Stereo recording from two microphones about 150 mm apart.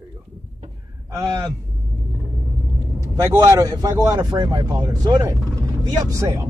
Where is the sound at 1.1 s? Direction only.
25° right (ahead or behind).